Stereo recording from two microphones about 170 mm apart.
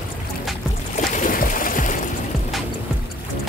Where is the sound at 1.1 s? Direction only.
50° left (ahead or behind).